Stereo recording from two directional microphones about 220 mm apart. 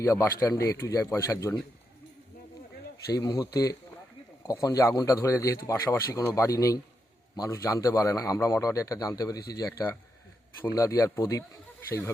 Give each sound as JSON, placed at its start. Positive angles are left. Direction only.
{"t": 0.0, "sound": "speech", "side_deg": 15}
{"t": 3.1, "sound": "speech", "side_deg": 15}